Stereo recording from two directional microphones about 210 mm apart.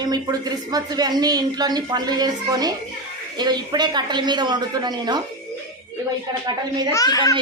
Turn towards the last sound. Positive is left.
turn(degrees=20)  # may be behind; listen again after turning